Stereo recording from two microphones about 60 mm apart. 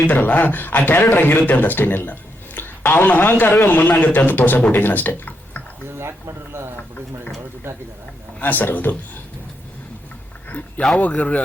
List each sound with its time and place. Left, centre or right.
0.1 s speech: left
6.0 s a sound: right
8.4 s a man's voice: left
11.0 s a man's voice: left